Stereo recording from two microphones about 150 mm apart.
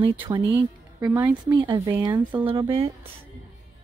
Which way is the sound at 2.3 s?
35° right (ahead or behind).